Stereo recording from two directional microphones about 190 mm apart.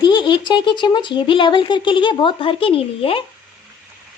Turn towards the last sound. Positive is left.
turn(degrees=30)  # may be behind; listen again after turning